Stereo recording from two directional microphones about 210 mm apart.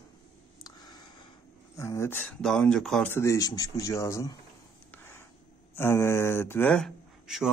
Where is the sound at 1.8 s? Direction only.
15° left (ahead or behind).